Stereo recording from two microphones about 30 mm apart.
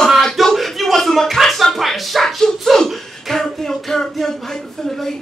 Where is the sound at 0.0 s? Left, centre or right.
Centre.